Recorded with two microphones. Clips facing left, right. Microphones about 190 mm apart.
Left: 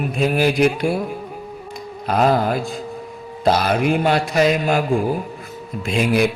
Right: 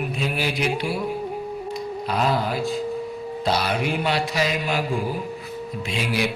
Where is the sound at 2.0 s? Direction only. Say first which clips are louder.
Left 7 dB; 50° left (ahead or behind).